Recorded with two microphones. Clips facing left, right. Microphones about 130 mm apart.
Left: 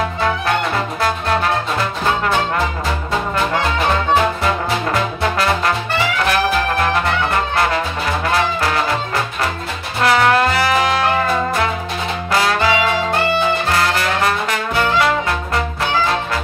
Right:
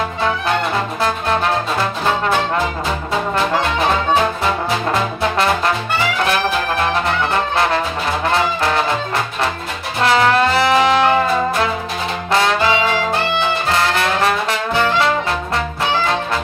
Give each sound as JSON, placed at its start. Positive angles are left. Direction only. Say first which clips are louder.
{"t": 10.0, "sound": "music", "louder": "even", "side_deg": -25}
{"t": 12.3, "sound": "brass instrument", "louder": "right 1 dB", "side_deg": -25}